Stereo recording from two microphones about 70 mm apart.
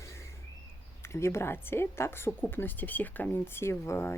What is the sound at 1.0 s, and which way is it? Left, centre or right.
Speech, left.